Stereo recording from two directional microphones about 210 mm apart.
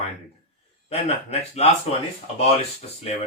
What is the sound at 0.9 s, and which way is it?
Speech, 30° left (ahead or behind).